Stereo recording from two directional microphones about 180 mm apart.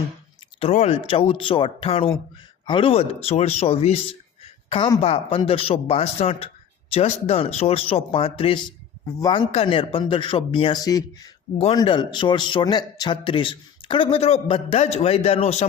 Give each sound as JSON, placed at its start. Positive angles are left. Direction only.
{"t": 0.6, "sound": "speech", "side_deg": 35}
{"t": 4.9, "sound": "speech", "side_deg": 35}